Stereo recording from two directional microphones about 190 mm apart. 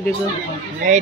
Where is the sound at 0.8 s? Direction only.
40° right (ahead or behind).